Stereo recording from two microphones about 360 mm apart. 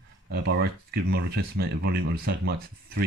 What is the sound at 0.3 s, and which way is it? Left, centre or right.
Speech, right.